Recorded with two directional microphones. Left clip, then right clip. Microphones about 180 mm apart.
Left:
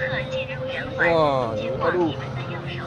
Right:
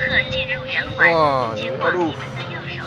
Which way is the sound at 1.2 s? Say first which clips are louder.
Right 3 dB; 10° right (ahead or behind).